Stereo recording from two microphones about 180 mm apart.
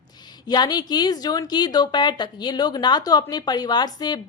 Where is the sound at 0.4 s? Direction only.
25° left (ahead or behind).